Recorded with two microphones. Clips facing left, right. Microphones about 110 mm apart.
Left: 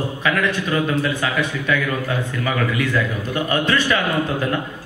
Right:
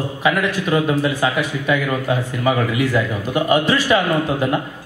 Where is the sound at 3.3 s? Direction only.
15° right (ahead or behind).